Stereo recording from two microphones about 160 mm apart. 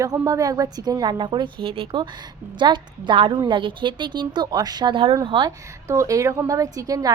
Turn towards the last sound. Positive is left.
turn(degrees=-20)  # may be behind; listen again after turning